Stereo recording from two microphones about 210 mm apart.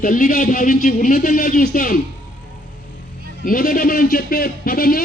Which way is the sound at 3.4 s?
40° left (ahead or behind).